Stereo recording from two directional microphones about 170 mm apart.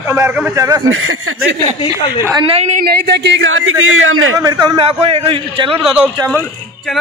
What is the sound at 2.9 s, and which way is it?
Speech, 70° right (ahead or behind).